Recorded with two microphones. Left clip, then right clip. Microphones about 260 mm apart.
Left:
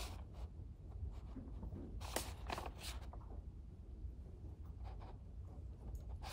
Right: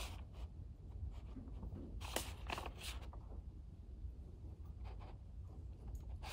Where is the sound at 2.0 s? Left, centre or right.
Centre.